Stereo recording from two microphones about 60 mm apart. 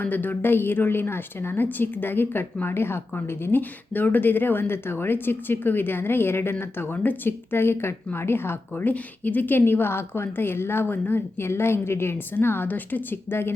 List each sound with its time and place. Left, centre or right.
0.0 s speech: left